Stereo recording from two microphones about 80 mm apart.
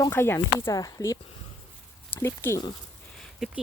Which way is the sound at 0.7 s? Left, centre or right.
Left.